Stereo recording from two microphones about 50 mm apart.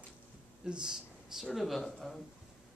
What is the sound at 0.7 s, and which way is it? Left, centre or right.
Speech, centre.